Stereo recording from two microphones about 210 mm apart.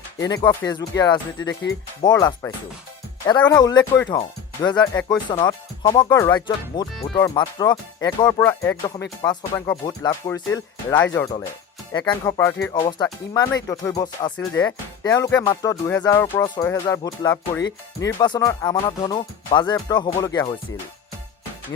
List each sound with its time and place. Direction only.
0.2 s speech: 15° left (ahead or behind)
3.5 s speech: 20° left (ahead or behind)